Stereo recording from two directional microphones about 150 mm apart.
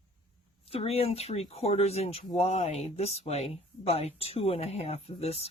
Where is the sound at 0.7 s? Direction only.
40° left (ahead or behind).